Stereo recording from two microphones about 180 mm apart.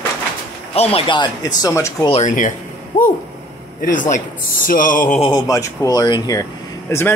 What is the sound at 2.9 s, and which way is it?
Speech, 45° left (ahead or behind).